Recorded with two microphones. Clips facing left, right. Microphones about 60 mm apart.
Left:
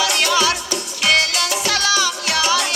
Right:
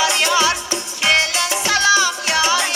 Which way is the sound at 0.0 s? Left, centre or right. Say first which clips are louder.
Right 1 dB; right.